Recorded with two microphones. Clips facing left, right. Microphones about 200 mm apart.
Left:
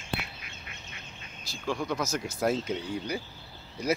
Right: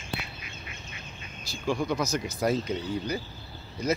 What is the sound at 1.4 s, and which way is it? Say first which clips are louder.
Speech: right 3 dB; centre (ahead or behind).